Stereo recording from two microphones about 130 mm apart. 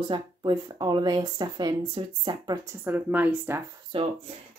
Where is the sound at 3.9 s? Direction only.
45° right (ahead or behind).